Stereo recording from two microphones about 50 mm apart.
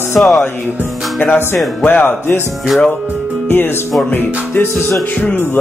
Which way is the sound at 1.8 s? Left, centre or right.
Left.